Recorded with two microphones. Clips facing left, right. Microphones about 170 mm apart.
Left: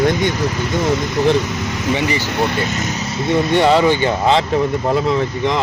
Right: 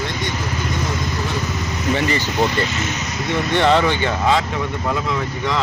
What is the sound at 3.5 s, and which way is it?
Speech, 10° left (ahead or behind).